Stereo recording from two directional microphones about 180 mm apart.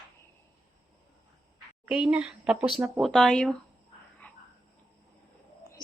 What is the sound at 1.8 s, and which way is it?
Speech, 5° right (ahead or behind).